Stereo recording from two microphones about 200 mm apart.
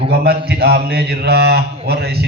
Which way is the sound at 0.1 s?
55° right (ahead or behind).